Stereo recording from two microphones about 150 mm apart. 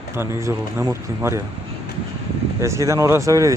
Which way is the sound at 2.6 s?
20° right (ahead or behind).